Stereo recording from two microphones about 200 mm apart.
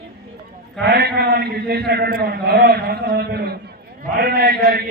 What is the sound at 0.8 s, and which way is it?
A man's voice, 55° right (ahead or behind).